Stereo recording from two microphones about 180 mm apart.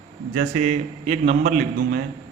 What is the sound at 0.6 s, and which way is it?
A man's voice, 40° right (ahead or behind).